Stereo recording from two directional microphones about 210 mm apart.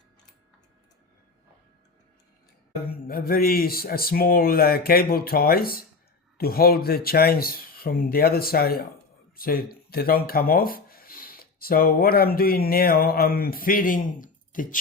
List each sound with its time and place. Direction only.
3.1 s speech: 45° left (ahead or behind)